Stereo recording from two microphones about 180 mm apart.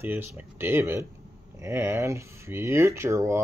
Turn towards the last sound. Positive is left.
turn(degrees=-15)  # may be behind; listen again after turning